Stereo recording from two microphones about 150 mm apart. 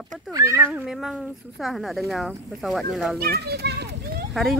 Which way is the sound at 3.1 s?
90° right.